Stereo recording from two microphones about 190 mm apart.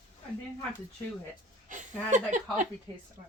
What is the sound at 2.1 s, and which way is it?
Speech, 40° right (ahead or behind).